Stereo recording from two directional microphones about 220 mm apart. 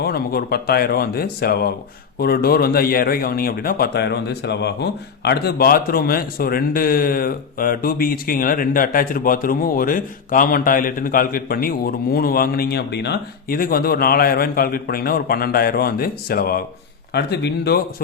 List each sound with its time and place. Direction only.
0.0 s speech: 45° left (ahead or behind)